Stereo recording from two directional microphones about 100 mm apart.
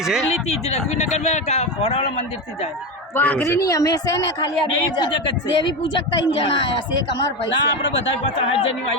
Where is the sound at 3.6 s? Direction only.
35° left (ahead or behind).